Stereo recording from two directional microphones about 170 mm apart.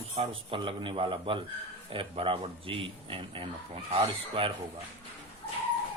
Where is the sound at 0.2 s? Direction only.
30° right (ahead or behind).